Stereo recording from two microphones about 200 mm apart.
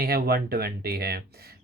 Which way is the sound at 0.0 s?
50° right (ahead or behind).